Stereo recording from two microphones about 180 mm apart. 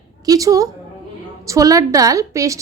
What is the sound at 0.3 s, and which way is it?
A woman's voice, 20° right (ahead or behind).